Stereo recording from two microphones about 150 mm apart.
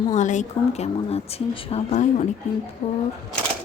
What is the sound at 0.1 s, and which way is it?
Speech, 55° left (ahead or behind).